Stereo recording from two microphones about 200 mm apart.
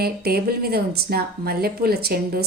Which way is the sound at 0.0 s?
50° right (ahead or behind).